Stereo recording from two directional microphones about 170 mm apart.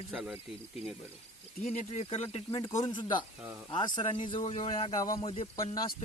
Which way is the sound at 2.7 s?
20° left (ahead or behind).